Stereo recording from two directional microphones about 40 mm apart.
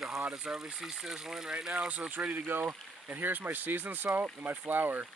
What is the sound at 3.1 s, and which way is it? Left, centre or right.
Speech, right.